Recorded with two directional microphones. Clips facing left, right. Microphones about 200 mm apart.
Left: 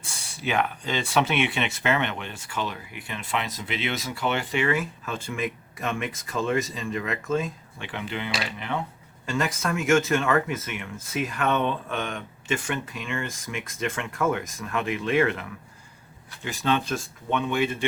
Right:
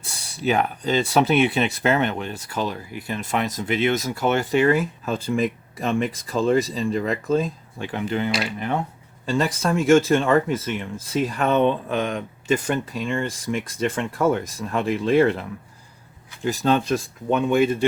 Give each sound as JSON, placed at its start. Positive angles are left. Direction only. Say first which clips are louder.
{"t": 0.0, "sound": "speech", "louder": "right 7 dB", "side_deg": -35}
{"t": 9.2, "sound": "speech", "louder": "right 5 dB", "side_deg": -35}